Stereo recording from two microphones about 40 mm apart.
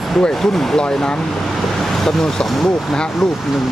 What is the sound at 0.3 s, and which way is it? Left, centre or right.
Speech, centre.